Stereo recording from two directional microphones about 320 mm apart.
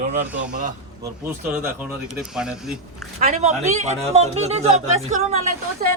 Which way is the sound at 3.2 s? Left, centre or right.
Right.